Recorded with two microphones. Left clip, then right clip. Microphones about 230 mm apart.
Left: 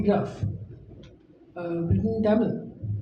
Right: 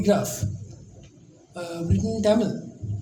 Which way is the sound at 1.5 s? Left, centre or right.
Right.